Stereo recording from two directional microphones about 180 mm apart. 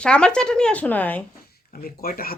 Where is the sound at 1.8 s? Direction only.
55° left (ahead or behind).